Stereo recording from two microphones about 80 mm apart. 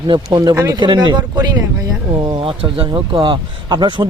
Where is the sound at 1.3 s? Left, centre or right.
Right.